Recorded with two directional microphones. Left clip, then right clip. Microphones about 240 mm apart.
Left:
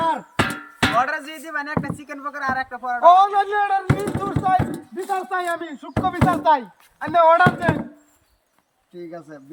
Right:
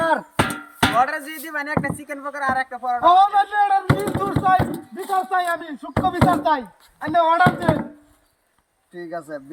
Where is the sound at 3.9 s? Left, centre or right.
Centre.